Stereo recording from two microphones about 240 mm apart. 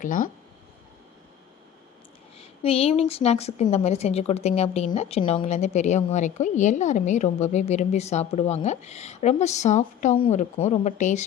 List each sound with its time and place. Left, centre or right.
0.0 s speech: left
2.4 s a sound: left
3.1 s a woman's voice: left